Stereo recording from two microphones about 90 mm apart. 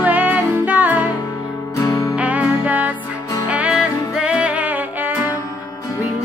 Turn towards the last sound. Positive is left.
turn(degrees=-15)  # may be behind; listen again after turning